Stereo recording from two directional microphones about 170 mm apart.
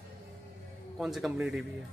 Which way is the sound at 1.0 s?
Centre (ahead or behind).